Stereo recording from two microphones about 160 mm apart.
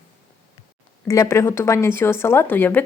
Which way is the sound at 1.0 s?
20° left (ahead or behind).